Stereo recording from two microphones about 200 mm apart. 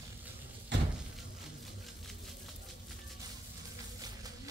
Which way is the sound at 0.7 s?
60° right (ahead or behind).